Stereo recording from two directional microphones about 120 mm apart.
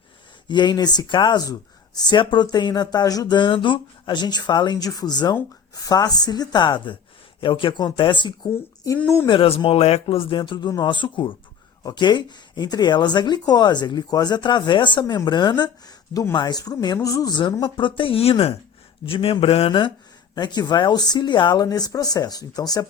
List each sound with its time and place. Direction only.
0.4 s speech: 40° left (ahead or behind)
20.3 s speech: 35° left (ahead or behind)